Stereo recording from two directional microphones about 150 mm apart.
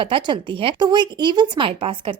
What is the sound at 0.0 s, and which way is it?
Speech, 35° right (ahead or behind).